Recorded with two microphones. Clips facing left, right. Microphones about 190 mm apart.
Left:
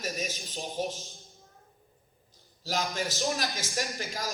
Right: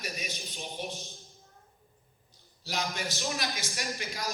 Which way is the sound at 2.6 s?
40° left (ahead or behind).